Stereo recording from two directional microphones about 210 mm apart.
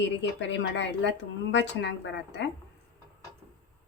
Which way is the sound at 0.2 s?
60° left (ahead or behind).